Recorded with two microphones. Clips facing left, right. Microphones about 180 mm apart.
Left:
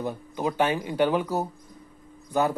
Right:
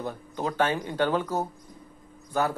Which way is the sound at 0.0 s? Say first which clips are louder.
Left 3 dB; 10° left (ahead or behind).